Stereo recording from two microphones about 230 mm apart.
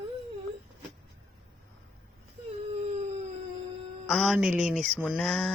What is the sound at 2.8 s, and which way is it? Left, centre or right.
Howl, right.